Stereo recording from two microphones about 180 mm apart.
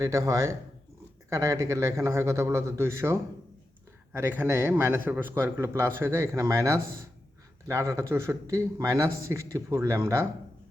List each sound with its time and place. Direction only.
0.0 s a man's voice: 15° right (ahead or behind)